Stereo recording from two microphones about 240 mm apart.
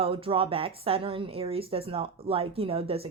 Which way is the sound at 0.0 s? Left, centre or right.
Right.